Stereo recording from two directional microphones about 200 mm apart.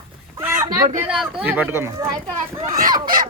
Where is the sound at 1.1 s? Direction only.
5° right (ahead or behind).